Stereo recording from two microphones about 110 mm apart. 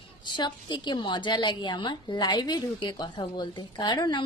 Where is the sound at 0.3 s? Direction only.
45° left (ahead or behind).